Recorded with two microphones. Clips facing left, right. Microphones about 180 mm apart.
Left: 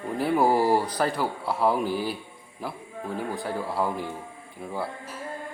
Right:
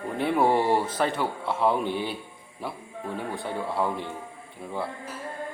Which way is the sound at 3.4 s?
Centre (ahead or behind).